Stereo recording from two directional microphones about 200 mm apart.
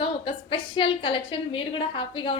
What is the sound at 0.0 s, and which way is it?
A woman's voice, 25° left (ahead or behind).